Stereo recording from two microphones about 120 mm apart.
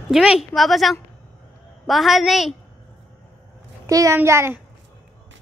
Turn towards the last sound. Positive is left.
turn(degrees=-20)  # may be behind; listen again after turning